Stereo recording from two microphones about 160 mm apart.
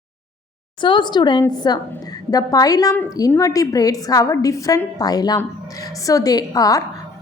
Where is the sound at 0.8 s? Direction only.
30° left (ahead or behind).